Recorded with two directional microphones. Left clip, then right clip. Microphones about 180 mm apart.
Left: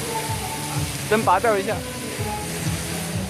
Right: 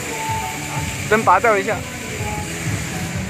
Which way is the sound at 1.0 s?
5° right (ahead or behind).